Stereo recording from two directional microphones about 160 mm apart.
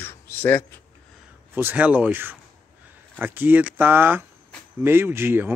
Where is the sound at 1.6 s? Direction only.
10° right (ahead or behind).